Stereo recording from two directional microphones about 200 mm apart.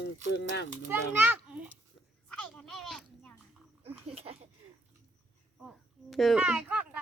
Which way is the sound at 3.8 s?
30° right (ahead or behind).